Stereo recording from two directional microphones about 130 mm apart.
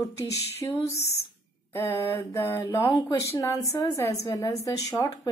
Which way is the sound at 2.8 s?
35° left (ahead or behind).